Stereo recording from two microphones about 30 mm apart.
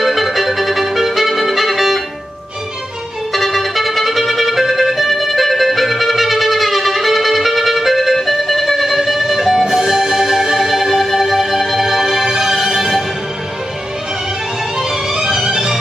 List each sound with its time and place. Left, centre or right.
0.0 s music: centre
3.3 s music: centre
14.8 s music: centre